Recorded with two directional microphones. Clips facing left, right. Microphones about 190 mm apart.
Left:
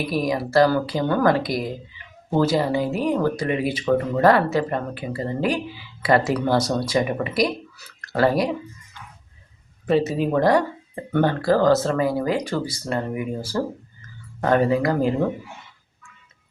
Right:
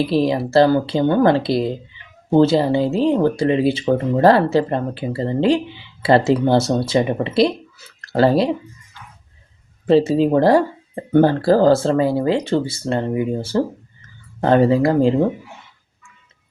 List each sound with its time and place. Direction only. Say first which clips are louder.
0.0 s speech: right 6 dB; 25° right (ahead or behind)
9.8 s speech: right 6 dB; 30° right (ahead or behind)